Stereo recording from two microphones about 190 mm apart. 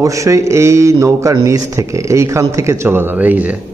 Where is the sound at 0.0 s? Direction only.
15° right (ahead or behind).